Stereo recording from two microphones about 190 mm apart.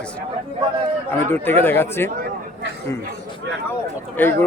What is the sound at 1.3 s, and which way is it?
Speech, 10° left (ahead or behind).